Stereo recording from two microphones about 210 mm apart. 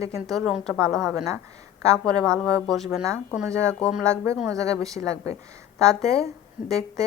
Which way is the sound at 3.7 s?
Centre (ahead or behind).